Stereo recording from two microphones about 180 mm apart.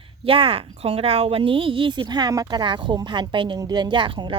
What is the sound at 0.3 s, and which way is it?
Speech, 30° right (ahead or behind).